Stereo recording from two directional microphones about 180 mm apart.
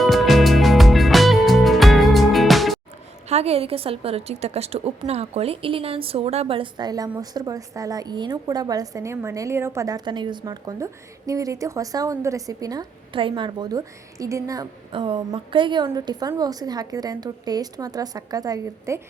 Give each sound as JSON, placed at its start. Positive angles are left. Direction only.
{"t": 0.0, "sound": "music", "side_deg": 0}
{"t": 3.2, "sound": "a woman's voice", "side_deg": -35}